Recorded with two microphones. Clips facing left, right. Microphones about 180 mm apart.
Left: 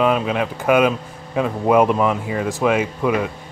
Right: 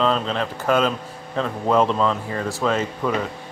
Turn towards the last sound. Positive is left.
turn(degrees=10)  # may be behind; listen again after turning